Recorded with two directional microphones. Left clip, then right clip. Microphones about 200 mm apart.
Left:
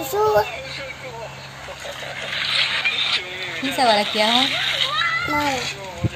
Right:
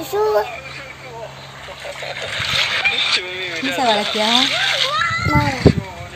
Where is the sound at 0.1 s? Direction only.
5° right (ahead or behind).